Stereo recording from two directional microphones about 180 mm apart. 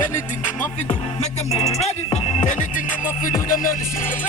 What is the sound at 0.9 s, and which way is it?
Music, 35° left (ahead or behind).